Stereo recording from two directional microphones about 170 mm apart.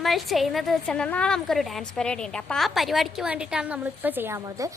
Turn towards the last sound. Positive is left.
turn(degrees=-20)  # may be behind; listen again after turning